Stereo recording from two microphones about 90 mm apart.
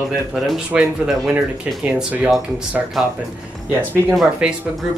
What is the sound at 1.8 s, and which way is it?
Speech, 15° right (ahead or behind).